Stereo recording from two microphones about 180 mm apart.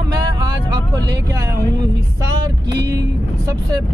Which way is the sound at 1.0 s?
70° right (ahead or behind).